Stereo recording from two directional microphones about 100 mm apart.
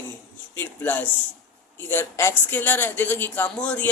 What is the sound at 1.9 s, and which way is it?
Speech, 25° left (ahead or behind).